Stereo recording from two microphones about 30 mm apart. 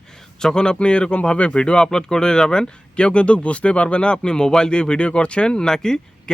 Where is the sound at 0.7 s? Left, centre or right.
Left.